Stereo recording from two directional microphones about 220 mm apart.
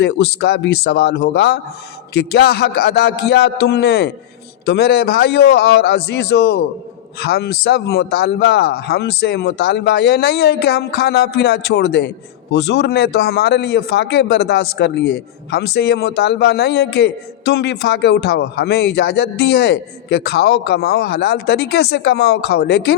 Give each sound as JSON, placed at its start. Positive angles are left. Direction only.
{"t": 0.0, "sound": "a man's voice", "side_deg": 50}